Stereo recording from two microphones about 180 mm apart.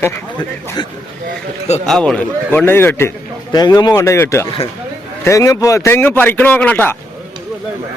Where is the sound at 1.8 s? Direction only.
5° left (ahead or behind).